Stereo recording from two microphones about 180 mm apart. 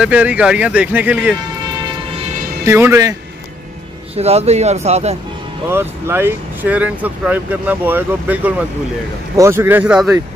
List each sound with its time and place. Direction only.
0.0 s speech: 10° right (ahead or behind)
2.6 s speech: 15° right (ahead or behind)
4.2 s speech: 35° right (ahead or behind)
5.7 s speech: 15° right (ahead or behind)